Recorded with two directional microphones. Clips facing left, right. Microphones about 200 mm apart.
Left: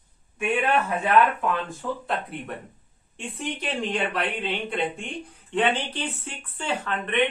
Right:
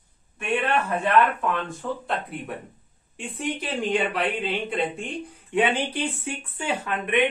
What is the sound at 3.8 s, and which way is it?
Speech, centre (ahead or behind).